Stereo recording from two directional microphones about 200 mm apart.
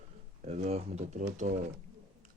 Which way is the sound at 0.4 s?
35° right (ahead or behind).